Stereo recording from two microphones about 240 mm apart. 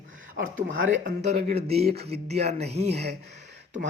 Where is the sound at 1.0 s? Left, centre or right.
Right.